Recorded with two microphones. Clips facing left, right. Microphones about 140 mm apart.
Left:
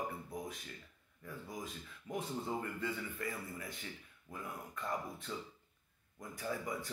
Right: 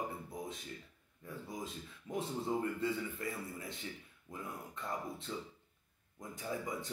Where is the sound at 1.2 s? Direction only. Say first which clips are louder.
Right 1 dB; 25° right (ahead or behind).